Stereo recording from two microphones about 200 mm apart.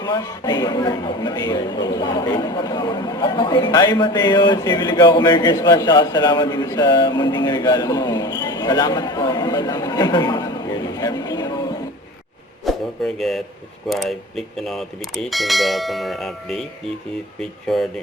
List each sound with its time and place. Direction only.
0.0 s speech: 20° left (ahead or behind)
12.7 s a sound: centre (ahead or behind)
13.1 s speech: centre (ahead or behind)
17.7 s speech: centre (ahead or behind)